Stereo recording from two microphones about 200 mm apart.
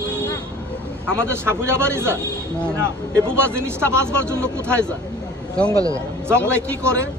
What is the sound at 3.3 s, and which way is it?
Speech, 10° right (ahead or behind).